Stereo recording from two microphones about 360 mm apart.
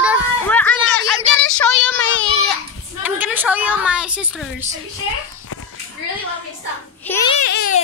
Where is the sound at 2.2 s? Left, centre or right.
Centre.